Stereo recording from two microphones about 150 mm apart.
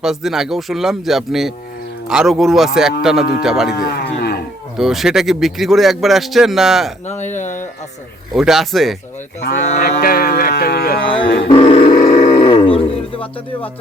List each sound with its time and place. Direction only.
0.0 s a man's voice: centre (ahead or behind)
3.8 s music: 85° left
4.8 s a man's voice: 5° right (ahead or behind)
7.1 s speech: 55° left (ahead or behind)
8.3 s a man's voice: centre (ahead or behind)
9.7 s music: 90° left
11.1 s a sound: 35° left (ahead or behind)